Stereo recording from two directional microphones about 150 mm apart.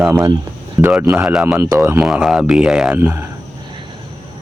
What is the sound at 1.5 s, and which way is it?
Speech, 15° right (ahead or behind).